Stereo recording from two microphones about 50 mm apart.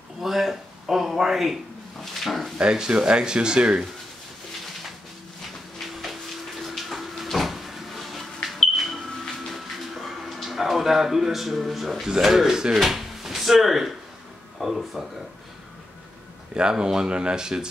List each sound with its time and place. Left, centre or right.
0.2 s speech: centre
2.0 s dog: centre
2.6 s speech: centre
6.6 s a sound: centre
12.7 s speech: centre
16.5 s speech: centre